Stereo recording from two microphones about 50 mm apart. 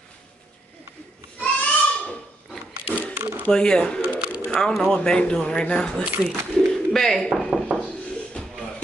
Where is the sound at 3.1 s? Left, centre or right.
Right.